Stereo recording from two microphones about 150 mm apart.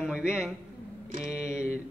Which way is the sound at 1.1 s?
55° right (ahead or behind).